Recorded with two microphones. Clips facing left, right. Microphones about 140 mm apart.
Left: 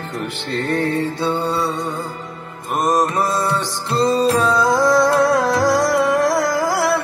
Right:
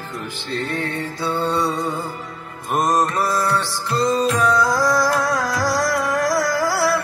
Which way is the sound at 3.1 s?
20° left (ahead or behind).